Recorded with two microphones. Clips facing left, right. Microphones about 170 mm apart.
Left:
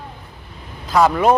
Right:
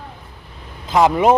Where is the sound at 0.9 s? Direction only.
20° right (ahead or behind).